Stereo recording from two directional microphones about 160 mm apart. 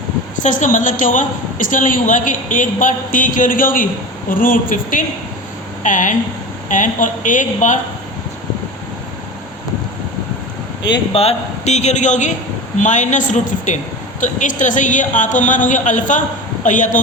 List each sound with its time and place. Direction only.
0.3 s a woman's voice: 50° left (ahead or behind)
10.8 s a man's voice: 30° left (ahead or behind); by 17.0 s 50° left (ahead or behind)